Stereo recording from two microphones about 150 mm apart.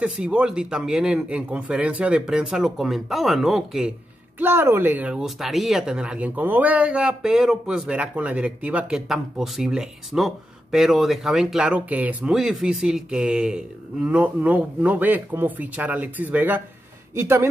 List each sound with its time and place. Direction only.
0.0 s speech: 5° right (ahead or behind)
4.4 s speech: 15° right (ahead or behind)